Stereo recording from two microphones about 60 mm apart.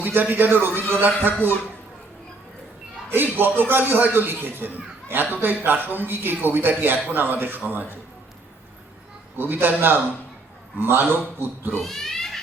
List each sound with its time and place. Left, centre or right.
0.0 s a man's voice: right
3.1 s a man's voice: right
9.4 s a man's voice: right
11.8 s a sound: centre